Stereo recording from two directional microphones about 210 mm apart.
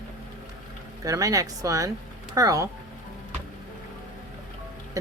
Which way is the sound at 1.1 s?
15° right (ahead or behind).